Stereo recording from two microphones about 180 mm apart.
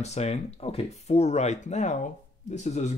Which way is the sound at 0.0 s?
35° left (ahead or behind).